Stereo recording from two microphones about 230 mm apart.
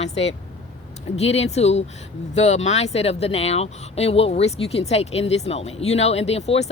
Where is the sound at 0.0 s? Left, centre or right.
Left.